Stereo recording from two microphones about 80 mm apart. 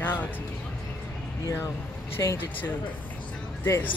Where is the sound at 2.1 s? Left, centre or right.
Left.